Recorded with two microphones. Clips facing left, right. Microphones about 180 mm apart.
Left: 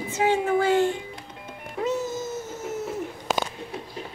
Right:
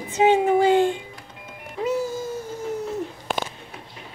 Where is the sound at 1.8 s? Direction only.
10° right (ahead or behind).